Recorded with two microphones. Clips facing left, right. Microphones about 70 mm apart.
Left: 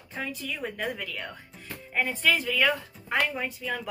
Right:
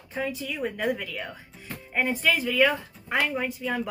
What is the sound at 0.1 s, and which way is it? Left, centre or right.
Speech, centre.